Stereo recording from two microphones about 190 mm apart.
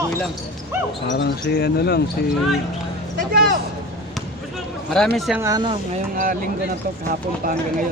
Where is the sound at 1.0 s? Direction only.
65° left (ahead or behind).